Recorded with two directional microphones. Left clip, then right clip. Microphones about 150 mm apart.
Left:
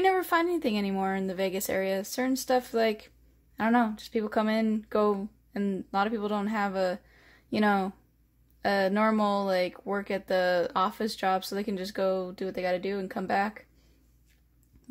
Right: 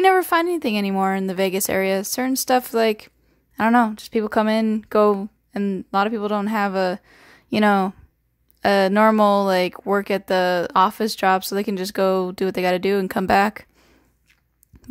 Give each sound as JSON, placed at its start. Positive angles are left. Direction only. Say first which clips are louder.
{"t": 0.0, "sound": "speech", "louder": "right 8 dB", "side_deg": -35}